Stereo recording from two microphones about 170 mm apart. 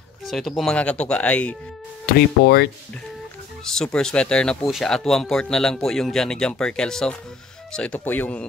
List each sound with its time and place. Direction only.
0.2 s speech: centre (ahead or behind)
2.4 s speech: 65° left (ahead or behind)
3.6 s speech: 5° left (ahead or behind)